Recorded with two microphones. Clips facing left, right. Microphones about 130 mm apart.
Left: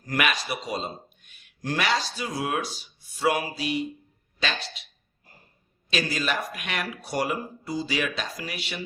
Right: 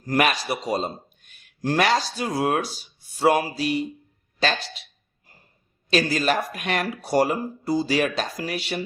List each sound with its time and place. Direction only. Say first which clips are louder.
0.0 s speech: right 5 dB; 35° right (ahead or behind)
5.9 s speech: right 6 dB; 40° right (ahead or behind)